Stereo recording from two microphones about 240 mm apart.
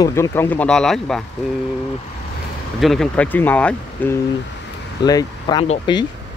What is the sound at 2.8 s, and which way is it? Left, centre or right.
Speech, centre.